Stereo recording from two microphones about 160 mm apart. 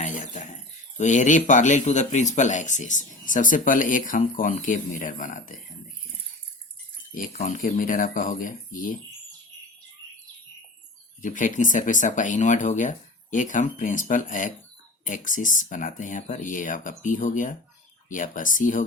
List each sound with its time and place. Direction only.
0.0 s a sound: 50° left (ahead or behind)
0.9 s speech: 50° left (ahead or behind)
7.3 s speech: 55° left (ahead or behind)
11.2 s speech: 55° left (ahead or behind)